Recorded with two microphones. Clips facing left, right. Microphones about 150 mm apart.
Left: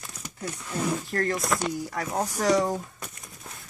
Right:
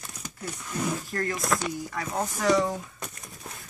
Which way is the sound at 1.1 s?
40° left (ahead or behind).